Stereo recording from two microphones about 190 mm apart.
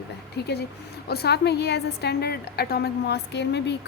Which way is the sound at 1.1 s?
60° left (ahead or behind).